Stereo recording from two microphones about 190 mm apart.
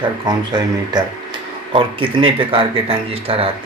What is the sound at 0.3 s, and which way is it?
Speech, 20° right (ahead or behind).